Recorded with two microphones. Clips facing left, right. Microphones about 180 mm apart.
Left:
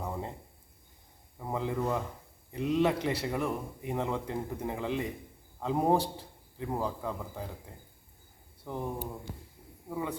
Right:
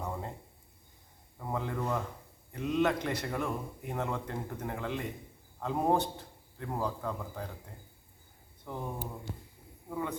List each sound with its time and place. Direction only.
0.0 s a sound: 10° left (ahead or behind)
1.4 s a sound: 15° left (ahead or behind)
2.6 s a man's voice: 30° left (ahead or behind)
2.8 s a man's voice: 10° left (ahead or behind)
8.6 s speech: 15° left (ahead or behind)
9.9 s a man's voice: 10° left (ahead or behind)